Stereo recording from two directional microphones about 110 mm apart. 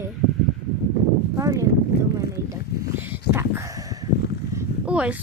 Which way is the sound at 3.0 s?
20° right (ahead or behind).